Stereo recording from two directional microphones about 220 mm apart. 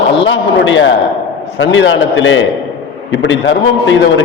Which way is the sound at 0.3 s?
60° left (ahead or behind).